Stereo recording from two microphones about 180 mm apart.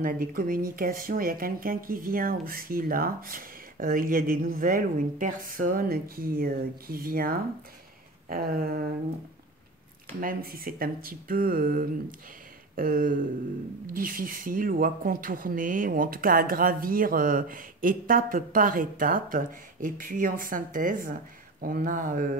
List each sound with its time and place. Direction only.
0.0 s speech: 50° right (ahead or behind)
8.3 s a sound: 55° right (ahead or behind)
10.2 s speech: 55° right (ahead or behind)